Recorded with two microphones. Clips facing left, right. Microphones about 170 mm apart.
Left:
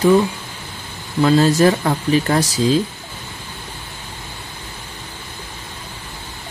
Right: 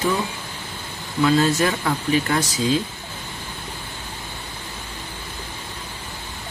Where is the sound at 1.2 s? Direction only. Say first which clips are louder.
Left 5 dB; 35° left (ahead or behind).